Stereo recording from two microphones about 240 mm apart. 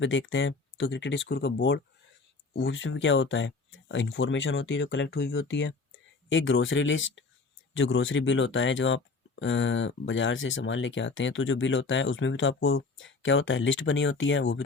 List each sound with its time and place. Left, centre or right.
0.0 s speech: left